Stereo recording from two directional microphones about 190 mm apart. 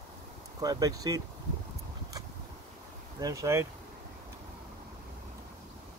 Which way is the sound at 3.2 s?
15° right (ahead or behind).